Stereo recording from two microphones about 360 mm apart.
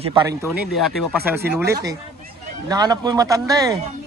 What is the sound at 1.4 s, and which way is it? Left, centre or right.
Speech, right.